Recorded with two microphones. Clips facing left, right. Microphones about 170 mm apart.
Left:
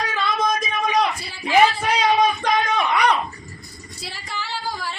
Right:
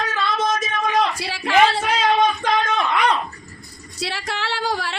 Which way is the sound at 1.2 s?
75° right (ahead or behind).